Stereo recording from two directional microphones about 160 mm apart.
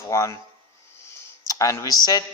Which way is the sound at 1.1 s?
20° left (ahead or behind).